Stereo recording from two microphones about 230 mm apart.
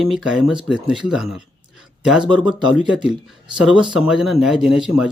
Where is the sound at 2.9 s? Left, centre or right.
Centre.